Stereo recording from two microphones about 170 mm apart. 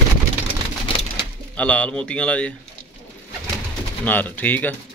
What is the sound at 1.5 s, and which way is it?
A man's voice, 5° left (ahead or behind).